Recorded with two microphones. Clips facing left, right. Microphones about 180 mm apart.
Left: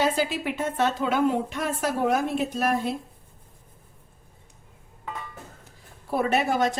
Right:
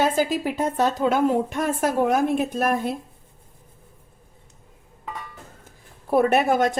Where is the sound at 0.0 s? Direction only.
45° right (ahead or behind).